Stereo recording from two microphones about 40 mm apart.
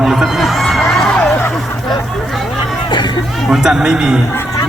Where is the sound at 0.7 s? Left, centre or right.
Centre.